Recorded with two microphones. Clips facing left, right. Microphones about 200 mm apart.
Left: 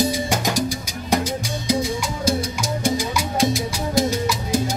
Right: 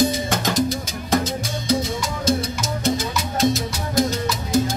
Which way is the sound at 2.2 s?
10° left (ahead or behind).